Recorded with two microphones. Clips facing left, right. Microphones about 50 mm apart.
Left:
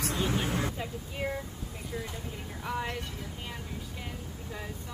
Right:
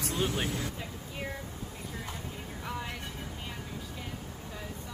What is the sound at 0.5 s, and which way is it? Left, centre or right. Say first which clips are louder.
Vehicle: left 4 dB; left.